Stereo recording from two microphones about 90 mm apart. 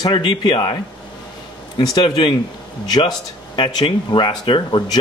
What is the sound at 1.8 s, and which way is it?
A man's voice, 55° left (ahead or behind).